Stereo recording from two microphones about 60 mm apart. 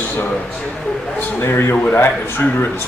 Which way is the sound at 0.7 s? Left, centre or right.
Centre.